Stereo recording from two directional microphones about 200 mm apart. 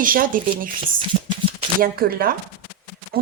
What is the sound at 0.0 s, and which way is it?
Speech, 45° right (ahead or behind).